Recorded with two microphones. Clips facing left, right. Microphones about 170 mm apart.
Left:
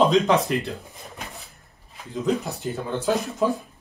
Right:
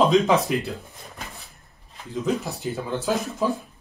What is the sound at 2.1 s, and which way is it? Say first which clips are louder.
Speech: left 1 dB; centre (ahead or behind).